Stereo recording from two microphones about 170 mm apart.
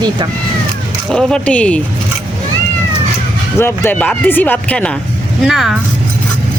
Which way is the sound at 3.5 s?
15° left (ahead or behind).